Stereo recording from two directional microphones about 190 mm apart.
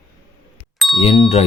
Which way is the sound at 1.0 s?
30° left (ahead or behind).